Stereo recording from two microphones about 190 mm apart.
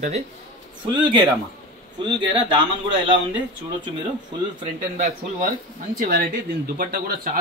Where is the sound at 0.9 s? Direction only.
25° right (ahead or behind).